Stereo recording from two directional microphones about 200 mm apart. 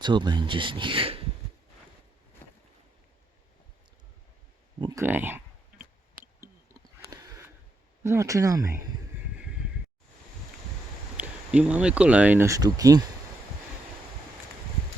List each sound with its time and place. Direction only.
0.0 s speech: 20° right (ahead or behind)
4.8 s clicking: 15° right (ahead or behind)
8.0 s speech: 15° right (ahead or behind)
9.4 s a sound: 5° right (ahead or behind)
11.2 s speech: 5° right (ahead or behind)